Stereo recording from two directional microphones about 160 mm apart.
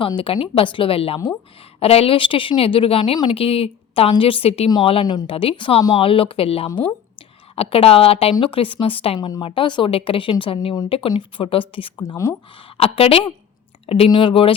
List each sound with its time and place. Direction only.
0.0 s a woman's voice: 35° left (ahead or behind)
12.7 s a woman's voice: 35° left (ahead or behind)